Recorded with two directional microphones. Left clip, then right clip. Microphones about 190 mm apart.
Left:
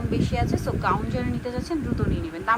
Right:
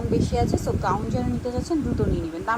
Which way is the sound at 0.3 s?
20° right (ahead or behind).